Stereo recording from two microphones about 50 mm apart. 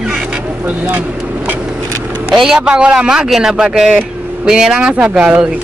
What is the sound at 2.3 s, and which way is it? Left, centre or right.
Speech, centre.